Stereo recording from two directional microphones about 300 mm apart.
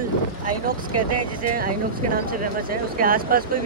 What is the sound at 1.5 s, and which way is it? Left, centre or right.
Speech, right.